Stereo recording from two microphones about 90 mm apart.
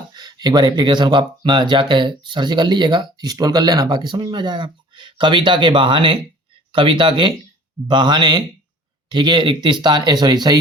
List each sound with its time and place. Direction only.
0.1 s speech: 55° right (ahead or behind)